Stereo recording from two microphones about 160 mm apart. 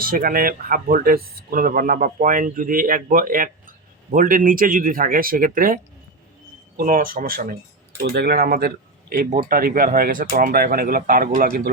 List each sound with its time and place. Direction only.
0.0 s speech: 65° right (ahead or behind)
8.1 s speech: 85° right; by 11.7 s 60° right (ahead or behind)